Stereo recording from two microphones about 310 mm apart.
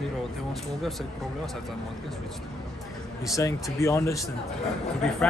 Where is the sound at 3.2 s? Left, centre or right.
Centre.